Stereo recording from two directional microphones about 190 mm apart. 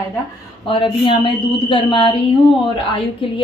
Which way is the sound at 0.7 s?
25° left (ahead or behind).